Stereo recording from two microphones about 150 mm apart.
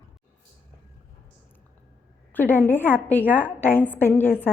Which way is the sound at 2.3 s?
15° left (ahead or behind).